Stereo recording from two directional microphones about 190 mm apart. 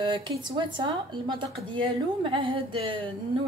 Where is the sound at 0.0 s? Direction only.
25° right (ahead or behind).